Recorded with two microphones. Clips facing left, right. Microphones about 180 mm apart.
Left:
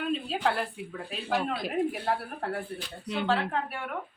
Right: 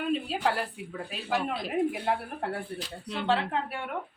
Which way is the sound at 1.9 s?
15° right (ahead or behind).